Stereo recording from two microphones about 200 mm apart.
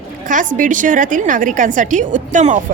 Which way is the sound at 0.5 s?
40° right (ahead or behind).